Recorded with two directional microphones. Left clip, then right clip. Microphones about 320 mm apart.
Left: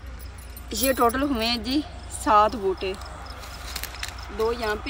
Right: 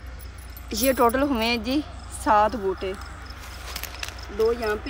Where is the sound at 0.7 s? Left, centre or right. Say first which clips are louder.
Right 1 dB; centre.